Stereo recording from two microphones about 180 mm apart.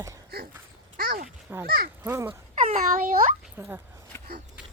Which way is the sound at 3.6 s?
10° right (ahead or behind).